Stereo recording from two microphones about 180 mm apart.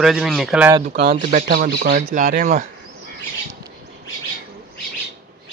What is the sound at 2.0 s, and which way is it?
Speech, 45° right (ahead or behind).